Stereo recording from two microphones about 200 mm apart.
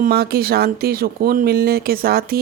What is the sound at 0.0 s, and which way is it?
Speech, 50° right (ahead or behind).